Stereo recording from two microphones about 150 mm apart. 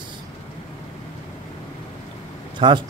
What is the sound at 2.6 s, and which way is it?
Speech, 30° right (ahead or behind).